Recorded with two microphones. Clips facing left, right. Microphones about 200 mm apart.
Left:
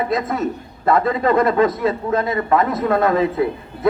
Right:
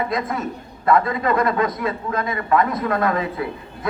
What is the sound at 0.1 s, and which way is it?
A man's voice, 25° left (ahead or behind).